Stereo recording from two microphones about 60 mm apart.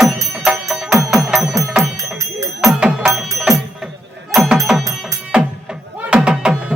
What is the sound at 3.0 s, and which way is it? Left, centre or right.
Music, centre.